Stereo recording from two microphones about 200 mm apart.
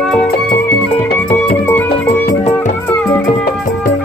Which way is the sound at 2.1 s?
35° left (ahead or behind).